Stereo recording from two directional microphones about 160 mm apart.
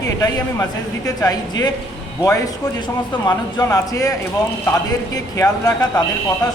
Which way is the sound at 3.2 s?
20° left (ahead or behind).